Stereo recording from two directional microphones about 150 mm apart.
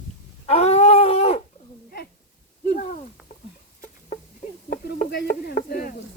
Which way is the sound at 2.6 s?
70° left (ahead or behind).